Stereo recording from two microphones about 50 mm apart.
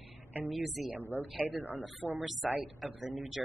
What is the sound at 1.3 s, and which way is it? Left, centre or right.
Speech, right.